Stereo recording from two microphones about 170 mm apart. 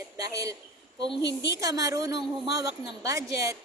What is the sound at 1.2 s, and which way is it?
Speech, 90° left.